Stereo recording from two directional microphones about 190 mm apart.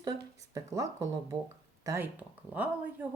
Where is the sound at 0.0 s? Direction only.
20° right (ahead or behind).